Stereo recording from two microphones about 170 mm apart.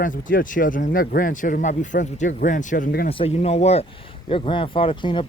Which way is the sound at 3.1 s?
35° left (ahead or behind).